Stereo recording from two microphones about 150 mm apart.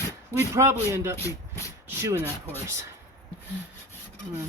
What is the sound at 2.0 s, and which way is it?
Speech, 20° right (ahead or behind).